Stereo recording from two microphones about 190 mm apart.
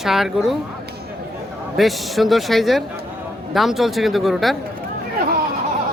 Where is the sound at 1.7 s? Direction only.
Centre (ahead or behind).